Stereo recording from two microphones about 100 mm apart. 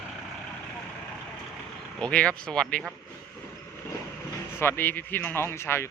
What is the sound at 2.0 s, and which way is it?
Speech, 10° left (ahead or behind).